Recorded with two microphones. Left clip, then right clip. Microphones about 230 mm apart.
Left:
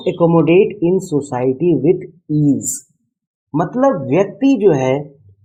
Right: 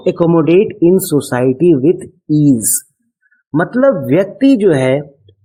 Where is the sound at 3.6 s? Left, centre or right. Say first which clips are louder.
Right 3 dB; right.